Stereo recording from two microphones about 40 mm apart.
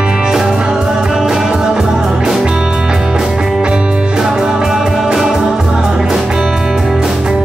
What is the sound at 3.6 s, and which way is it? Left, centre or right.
Music, right.